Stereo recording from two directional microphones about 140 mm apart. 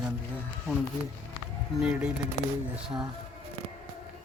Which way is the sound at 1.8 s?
5° right (ahead or behind).